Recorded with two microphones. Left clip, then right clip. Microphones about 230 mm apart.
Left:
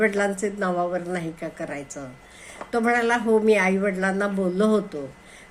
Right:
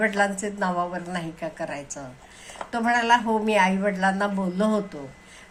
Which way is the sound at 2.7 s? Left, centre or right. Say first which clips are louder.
Right 1 dB; centre.